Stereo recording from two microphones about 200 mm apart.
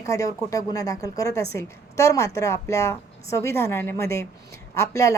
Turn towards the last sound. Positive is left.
turn(degrees=15)  # may be behind; listen again after turning